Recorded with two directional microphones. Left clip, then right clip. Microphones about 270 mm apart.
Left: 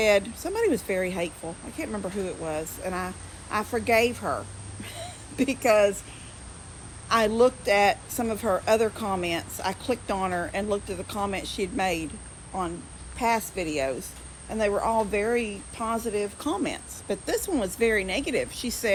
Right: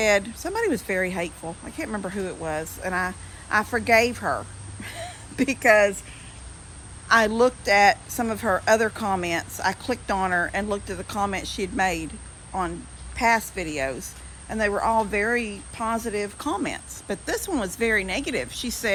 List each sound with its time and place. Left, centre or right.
0.0 s a woman's voice: centre
7.1 s speech: centre
13.1 s speech: centre